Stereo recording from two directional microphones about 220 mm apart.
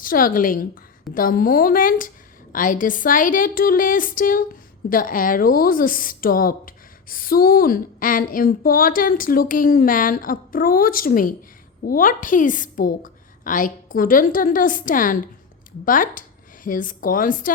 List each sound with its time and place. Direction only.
0.0 s a woman's voice: 40° left (ahead or behind)